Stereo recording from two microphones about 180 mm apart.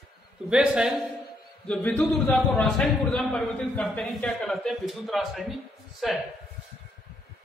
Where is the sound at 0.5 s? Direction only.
5° right (ahead or behind).